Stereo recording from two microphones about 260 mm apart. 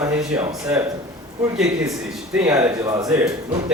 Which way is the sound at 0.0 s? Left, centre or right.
Centre.